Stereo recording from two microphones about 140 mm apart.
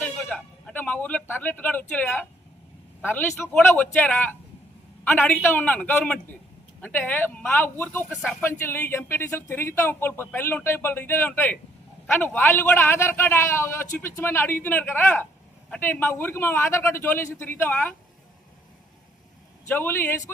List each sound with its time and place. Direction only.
0.0 s a sound: 10° left (ahead or behind)
3.0 s speech: 15° left (ahead or behind)
19.6 s speech: 15° left (ahead or behind)